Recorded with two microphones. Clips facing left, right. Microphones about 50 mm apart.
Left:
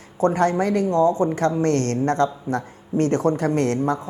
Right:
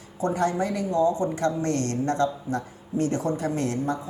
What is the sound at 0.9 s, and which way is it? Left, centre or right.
A woman's voice, left.